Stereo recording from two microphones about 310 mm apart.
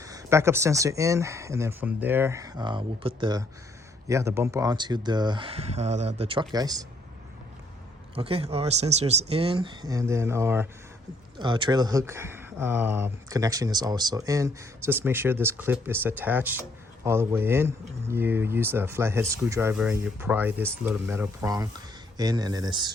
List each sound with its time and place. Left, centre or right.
0.0 s speech: centre
8.1 s speech: centre